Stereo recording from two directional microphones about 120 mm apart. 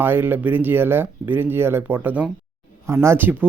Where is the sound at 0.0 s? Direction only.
15° right (ahead or behind).